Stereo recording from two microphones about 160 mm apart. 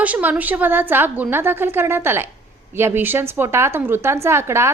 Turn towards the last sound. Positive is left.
turn(degrees=-15)  # may be behind; listen again after turning